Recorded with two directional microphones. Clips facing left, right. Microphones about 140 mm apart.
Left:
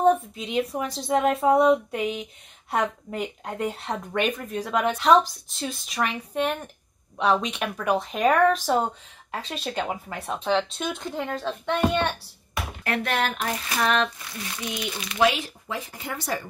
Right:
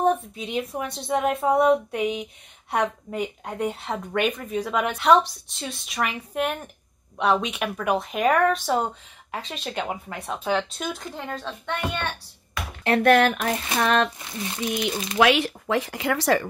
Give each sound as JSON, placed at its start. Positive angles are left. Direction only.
{"t": 0.0, "sound": "speech", "side_deg": 0}
{"t": 13.0, "sound": "speech", "side_deg": -55}
{"t": 13.7, "sound": "speech", "side_deg": -30}
{"t": 14.6, "sound": "speech", "side_deg": -40}
{"t": 15.1, "sound": "speech", "side_deg": -70}